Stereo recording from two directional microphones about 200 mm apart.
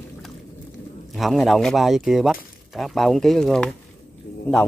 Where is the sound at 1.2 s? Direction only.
Centre (ahead or behind).